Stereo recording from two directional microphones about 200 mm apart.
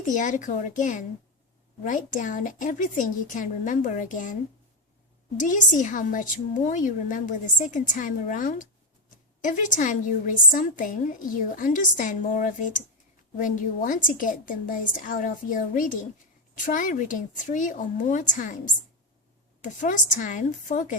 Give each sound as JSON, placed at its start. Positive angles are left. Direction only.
{"t": 0.0, "sound": "a woman's voice", "side_deg": 40}
{"t": 5.4, "sound": "a woman's voice", "side_deg": 40}